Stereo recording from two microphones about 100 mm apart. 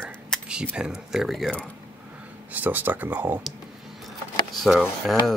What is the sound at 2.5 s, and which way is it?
Speech, 15° right (ahead or behind).